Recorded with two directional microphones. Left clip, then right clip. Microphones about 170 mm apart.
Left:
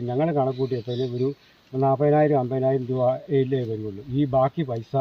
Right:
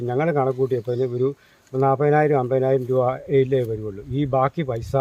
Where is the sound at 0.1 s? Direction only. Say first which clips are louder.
Right 2 dB; 20° right (ahead or behind).